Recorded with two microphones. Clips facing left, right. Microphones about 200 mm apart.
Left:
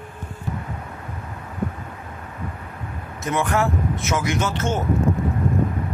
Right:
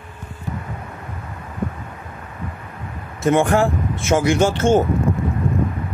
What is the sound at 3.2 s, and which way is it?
Speech, 30° right (ahead or behind).